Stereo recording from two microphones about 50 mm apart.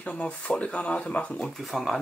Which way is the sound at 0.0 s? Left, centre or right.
Left.